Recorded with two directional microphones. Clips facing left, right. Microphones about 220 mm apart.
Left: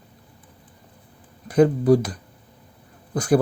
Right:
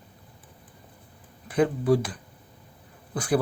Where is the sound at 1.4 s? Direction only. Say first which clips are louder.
Left 6 dB; 40° left (ahead or behind).